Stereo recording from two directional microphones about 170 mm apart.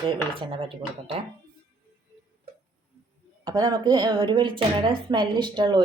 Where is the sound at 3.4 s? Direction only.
25° right (ahead or behind).